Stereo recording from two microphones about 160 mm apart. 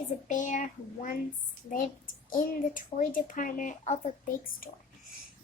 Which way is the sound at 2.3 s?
55° left (ahead or behind).